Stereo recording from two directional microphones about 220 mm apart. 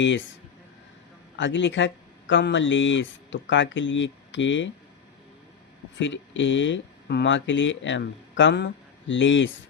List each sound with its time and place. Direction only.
1.4 s speech: 55° left (ahead or behind)
6.0 s speech: 55° left (ahead or behind)